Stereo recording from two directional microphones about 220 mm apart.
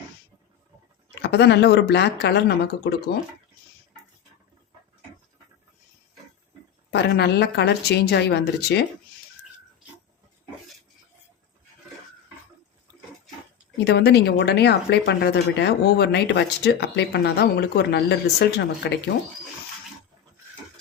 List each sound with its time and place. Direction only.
1.2 s speech: 50° left (ahead or behind)
6.9 s speech: 50° left (ahead or behind)
13.8 s speech: 50° left (ahead or behind)